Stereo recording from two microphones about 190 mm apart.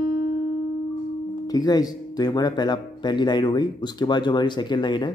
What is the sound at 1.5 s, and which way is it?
Speech, 20° left (ahead or behind).